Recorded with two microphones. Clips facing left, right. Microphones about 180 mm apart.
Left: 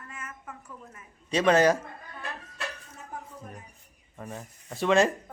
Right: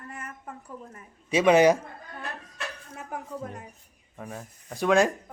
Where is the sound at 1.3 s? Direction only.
10° right (ahead or behind).